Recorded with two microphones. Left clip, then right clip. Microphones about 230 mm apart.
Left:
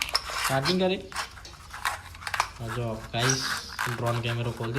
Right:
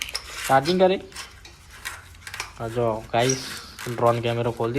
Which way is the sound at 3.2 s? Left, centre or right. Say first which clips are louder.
Right 1 dB; centre.